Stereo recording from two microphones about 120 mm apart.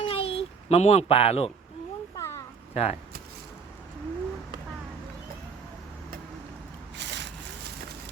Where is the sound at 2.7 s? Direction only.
60° left (ahead or behind).